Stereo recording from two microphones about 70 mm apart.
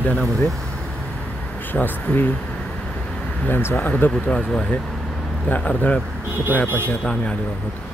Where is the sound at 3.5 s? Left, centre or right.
Left.